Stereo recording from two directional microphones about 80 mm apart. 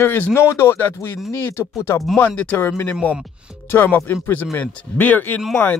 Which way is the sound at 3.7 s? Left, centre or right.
Left.